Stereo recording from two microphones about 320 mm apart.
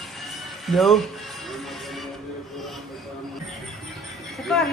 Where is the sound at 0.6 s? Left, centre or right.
Centre.